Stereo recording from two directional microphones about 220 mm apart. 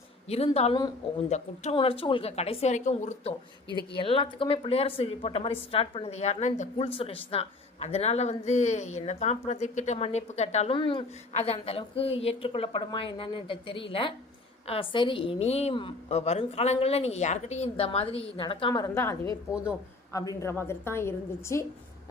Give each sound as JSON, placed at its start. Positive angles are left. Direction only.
{"t": 0.3, "sound": "speech", "side_deg": 30}
{"t": 20.1, "sound": "a woman's voice", "side_deg": 15}